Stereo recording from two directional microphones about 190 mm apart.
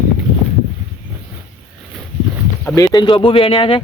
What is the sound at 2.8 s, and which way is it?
Speech, 20° left (ahead or behind).